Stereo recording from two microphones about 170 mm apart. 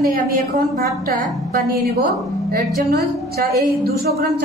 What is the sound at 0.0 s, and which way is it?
A man's voice, 60° right (ahead or behind).